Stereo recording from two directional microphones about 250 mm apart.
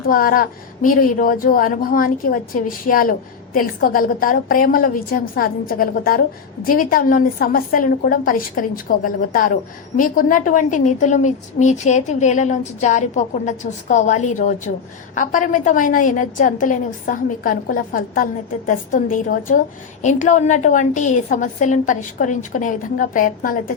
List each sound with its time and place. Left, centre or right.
0.0 s a woman's voice: left